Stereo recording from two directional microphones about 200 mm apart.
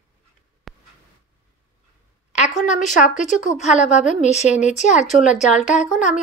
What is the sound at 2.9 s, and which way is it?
Speech, 40° left (ahead or behind).